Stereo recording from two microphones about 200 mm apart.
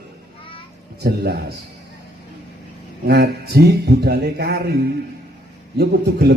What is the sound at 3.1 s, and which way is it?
A man's voice, 55° right (ahead or behind).